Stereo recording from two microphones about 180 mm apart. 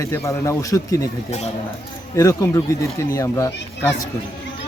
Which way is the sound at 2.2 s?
15° left (ahead or behind).